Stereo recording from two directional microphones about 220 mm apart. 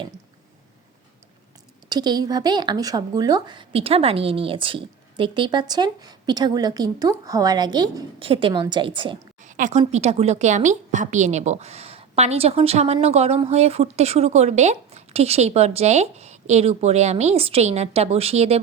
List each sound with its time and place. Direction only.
1.9 s a woman's voice: 20° right (ahead or behind)
9.4 s a woman's voice: 35° right (ahead or behind)